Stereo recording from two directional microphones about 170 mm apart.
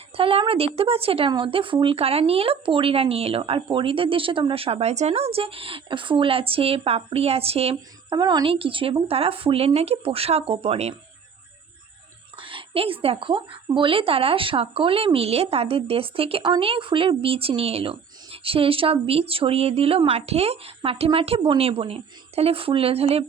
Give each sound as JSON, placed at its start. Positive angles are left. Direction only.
{"t": 0.2, "sound": "a woman's voice", "side_deg": -35}
{"t": 12.4, "sound": "a woman's voice", "side_deg": -30}